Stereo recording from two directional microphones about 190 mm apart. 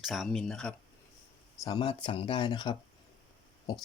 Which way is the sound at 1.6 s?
25° left (ahead or behind).